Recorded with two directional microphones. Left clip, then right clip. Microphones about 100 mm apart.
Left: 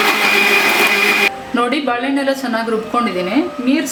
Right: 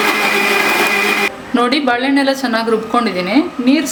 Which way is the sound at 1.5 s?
35° right (ahead or behind).